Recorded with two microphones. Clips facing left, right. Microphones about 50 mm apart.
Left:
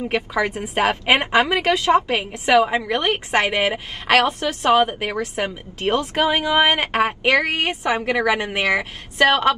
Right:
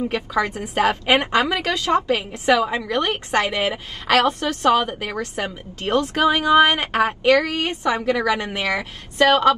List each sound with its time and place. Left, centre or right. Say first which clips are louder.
0.1 s a woman's voice: left 1 dB; left